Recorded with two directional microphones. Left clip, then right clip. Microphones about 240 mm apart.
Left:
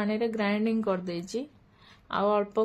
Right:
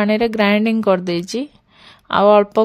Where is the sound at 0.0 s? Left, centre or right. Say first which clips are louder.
Right 13 dB; right.